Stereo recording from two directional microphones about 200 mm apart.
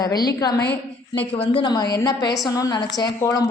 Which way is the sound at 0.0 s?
20° left (ahead or behind).